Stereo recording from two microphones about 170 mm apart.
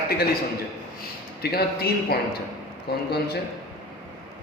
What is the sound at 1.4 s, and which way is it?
Speech, 65° left (ahead or behind).